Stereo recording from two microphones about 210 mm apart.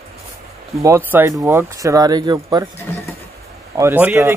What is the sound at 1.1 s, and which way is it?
Speech, 10° right (ahead or behind).